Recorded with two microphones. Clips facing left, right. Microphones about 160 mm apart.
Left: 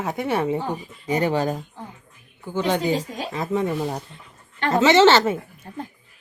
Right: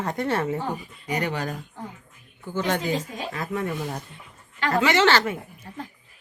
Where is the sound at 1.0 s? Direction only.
25° left (ahead or behind).